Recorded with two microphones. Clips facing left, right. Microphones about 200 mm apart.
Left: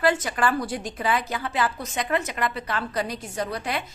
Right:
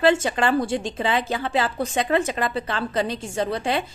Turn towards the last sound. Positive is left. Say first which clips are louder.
# right 5 dB
turn(degrees=-25)  # may be behind; listen again after turning